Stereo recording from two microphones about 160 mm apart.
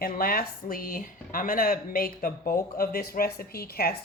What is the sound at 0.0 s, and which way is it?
Speech, 65° left (ahead or behind).